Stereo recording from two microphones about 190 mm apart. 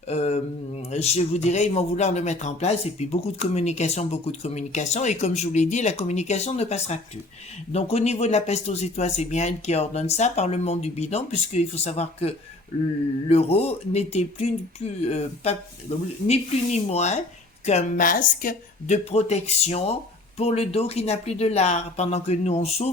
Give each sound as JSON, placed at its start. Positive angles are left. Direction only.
{"t": 0.1, "sound": "a woman's voice", "side_deg": 35}
{"t": 19.1, "sound": "speech", "side_deg": 35}